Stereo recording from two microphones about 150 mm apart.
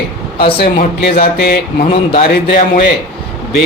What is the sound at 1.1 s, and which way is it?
Speech, 90° left.